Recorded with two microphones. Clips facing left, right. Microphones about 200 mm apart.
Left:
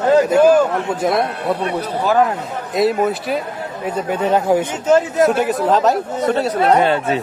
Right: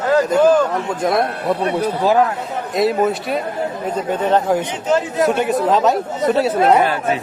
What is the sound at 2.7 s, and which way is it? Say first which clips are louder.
A man's voice: even; centre (ahead or behind).